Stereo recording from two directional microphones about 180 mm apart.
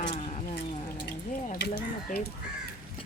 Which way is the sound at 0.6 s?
35° left (ahead or behind).